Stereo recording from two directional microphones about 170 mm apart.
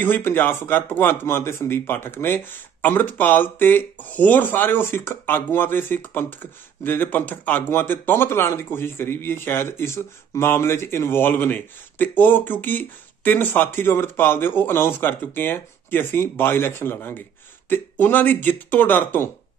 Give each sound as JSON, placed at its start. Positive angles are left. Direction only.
{"t": 0.0, "sound": "speech", "side_deg": 10}